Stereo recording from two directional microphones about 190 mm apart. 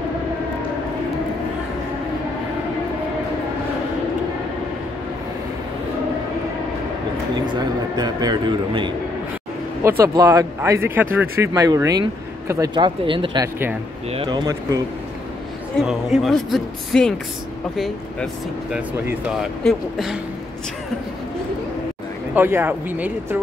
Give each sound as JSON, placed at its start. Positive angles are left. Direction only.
{"t": 7.3, "sound": "a man's voice", "side_deg": -20}
{"t": 15.9, "sound": "speech", "side_deg": 0}
{"t": 22.3, "sound": "speech", "side_deg": -10}